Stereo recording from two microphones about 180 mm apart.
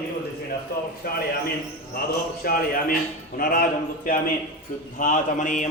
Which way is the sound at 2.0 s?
55° left (ahead or behind).